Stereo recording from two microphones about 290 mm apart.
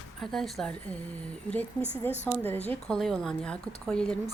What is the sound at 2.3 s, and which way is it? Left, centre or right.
Speech, centre.